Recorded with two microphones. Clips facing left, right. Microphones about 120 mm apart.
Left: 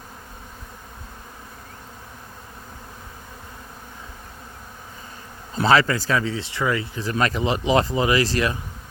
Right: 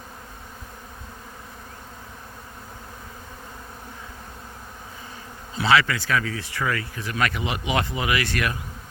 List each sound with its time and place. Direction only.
5.5 s speech: 40° left (ahead or behind); by 7.0 s 20° left (ahead or behind)
7.0 s speech: 35° left (ahead or behind)